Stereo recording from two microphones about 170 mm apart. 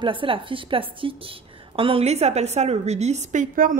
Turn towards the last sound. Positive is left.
turn(degrees=-50)  # may be behind; listen again after turning